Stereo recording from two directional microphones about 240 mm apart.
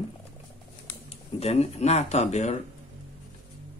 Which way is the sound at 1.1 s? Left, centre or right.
Left.